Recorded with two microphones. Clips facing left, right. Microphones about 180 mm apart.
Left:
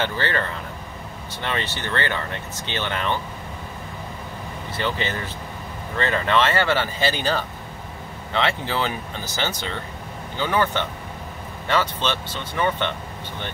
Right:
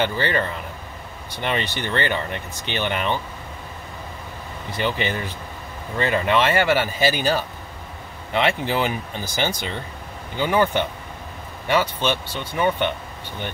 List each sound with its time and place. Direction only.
0.0 s speech: 15° right (ahead or behind)
4.7 s speech: 15° right (ahead or behind)